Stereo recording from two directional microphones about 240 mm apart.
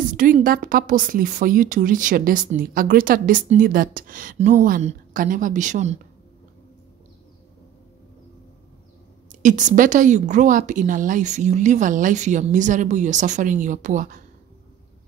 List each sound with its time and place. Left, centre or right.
0.0 s speech: right
9.4 s speech: right